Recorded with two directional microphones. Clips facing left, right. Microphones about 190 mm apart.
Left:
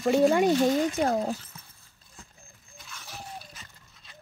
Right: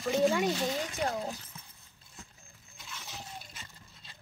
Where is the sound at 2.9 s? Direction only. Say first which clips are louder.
Left 3 dB; 25° right (ahead or behind).